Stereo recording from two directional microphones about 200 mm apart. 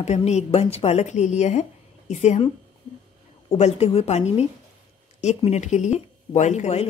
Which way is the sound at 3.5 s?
30° left (ahead or behind).